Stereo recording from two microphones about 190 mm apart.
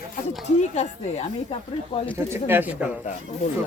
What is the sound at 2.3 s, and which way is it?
Speech, 10° right (ahead or behind).